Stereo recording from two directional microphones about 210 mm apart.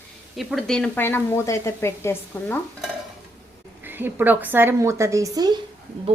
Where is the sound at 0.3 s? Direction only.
Centre (ahead or behind).